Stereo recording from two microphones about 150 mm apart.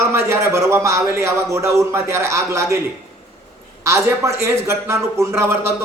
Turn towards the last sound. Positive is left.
turn(degrees=-15)  # may be behind; listen again after turning